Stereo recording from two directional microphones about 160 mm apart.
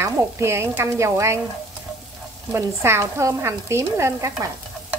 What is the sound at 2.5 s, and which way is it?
Speech, 15° right (ahead or behind).